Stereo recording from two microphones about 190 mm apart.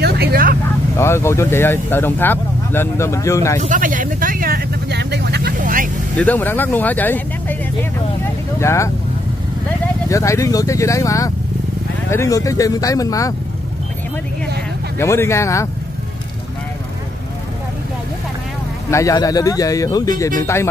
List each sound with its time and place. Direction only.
0.0 s vehicle: 55° right (ahead or behind)
0.9 s speech: 15° left (ahead or behind)
3.6 s vehicle: 45° right (ahead or behind); by 5.5 s 60° right (ahead or behind)
5.6 s vehicle: 45° right (ahead or behind)
6.1 s speech: 10° left (ahead or behind)
8.5 s speech: 15° left (ahead or behind)
10.0 s speech: 15° left (ahead or behind)
15.0 s speech: 15° left (ahead or behind)
18.9 s speech: 15° left (ahead or behind)